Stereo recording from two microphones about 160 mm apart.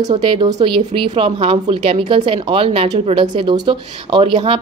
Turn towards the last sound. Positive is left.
turn(degrees=-35)  # may be behind; listen again after turning